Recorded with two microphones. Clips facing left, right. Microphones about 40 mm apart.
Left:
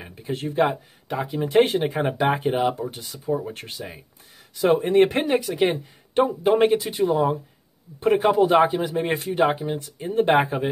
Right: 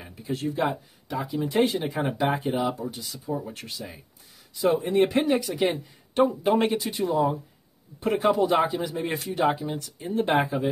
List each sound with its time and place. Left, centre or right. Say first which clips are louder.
0.0 s speech: left 1 dB; left
5.4 s speech: left 4 dB; left
5.7 s speech: left 3 dB; left
6.5 s speech: left 5 dB; centre
8.3 s speech: left 3 dB; left